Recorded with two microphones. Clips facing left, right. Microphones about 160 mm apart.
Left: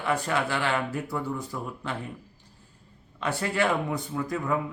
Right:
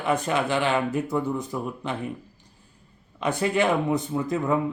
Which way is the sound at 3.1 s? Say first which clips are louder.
Right 4 dB; 20° right (ahead or behind).